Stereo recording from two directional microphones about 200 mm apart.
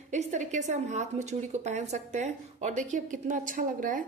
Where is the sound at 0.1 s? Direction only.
35° right (ahead or behind).